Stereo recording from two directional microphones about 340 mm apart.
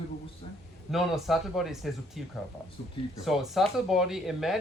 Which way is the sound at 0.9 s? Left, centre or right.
Centre.